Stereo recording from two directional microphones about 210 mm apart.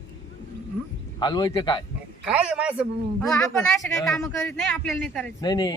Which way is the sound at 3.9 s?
10° left (ahead or behind).